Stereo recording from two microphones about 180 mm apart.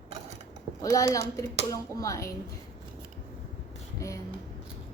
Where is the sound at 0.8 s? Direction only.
20° left (ahead or behind).